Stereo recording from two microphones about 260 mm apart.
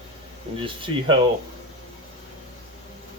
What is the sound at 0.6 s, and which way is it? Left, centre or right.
Speech, centre.